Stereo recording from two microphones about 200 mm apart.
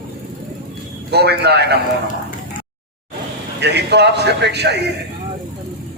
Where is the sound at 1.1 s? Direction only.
55° right (ahead or behind).